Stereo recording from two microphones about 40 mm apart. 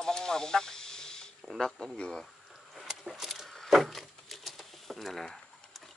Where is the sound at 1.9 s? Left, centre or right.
Left.